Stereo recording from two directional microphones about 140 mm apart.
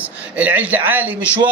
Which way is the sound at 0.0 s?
10° right (ahead or behind).